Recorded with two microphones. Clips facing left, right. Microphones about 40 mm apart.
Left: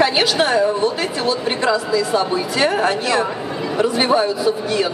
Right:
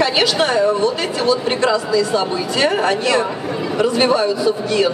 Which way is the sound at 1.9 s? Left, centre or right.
Left.